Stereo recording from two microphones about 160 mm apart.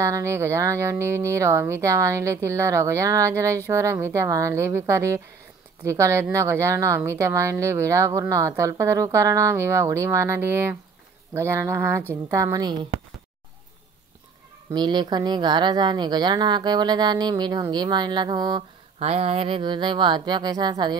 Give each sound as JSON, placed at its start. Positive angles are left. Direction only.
{"t": 0.0, "sound": "speech", "side_deg": -20}
{"t": 14.7, "sound": "speech", "side_deg": -25}
{"t": 18.9, "sound": "speech", "side_deg": -35}